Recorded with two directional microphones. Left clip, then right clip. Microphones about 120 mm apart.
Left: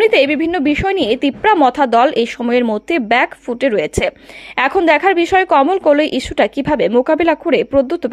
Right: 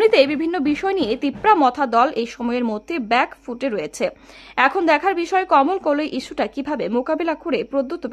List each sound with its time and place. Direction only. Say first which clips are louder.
0.0 s a woman's voice: left 3 dB; 25° left (ahead or behind)